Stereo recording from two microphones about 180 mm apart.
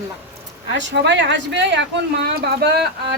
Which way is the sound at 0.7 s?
85° right.